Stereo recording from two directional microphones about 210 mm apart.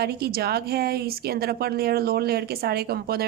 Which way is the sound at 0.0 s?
50° right (ahead or behind).